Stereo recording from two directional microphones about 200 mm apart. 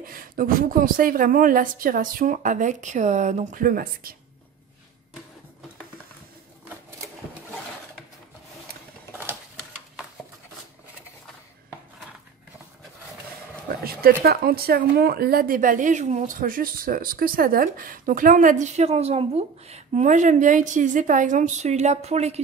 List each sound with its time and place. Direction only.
0.0 s a woman's voice: 45° right (ahead or behind)
13.7 s speech: 50° right (ahead or behind); by 22.4 s 35° right (ahead or behind)